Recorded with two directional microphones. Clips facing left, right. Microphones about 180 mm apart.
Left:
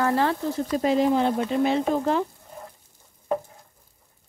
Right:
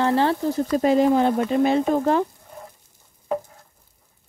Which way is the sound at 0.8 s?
50° right (ahead or behind).